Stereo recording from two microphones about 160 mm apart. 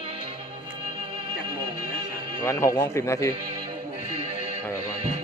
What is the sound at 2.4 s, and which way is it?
Speech, 20° left (ahead or behind).